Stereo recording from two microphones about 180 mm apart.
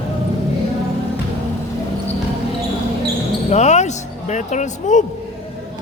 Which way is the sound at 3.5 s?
40° left (ahead or behind).